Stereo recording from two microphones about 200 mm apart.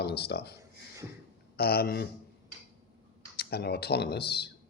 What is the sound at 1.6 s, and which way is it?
Speech, 55° left (ahead or behind).